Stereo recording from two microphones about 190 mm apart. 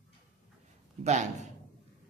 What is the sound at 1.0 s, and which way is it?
Speech, 40° right (ahead or behind).